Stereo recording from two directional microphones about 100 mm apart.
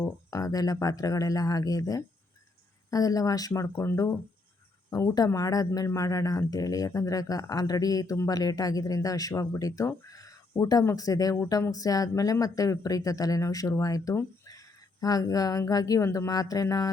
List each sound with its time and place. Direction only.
0.3 s a man's voice: 35° left (ahead or behind)